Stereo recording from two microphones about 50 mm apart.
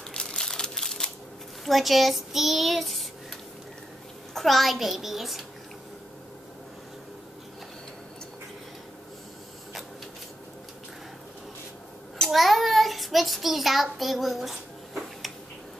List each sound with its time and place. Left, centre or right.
0.1 s crushing: centre
0.4 s a sound: centre
1.6 s child singing: centre
4.3 s child singing: centre
12.3 s child singing: centre